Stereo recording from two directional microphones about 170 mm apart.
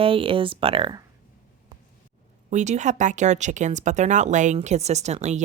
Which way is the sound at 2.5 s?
45° right (ahead or behind).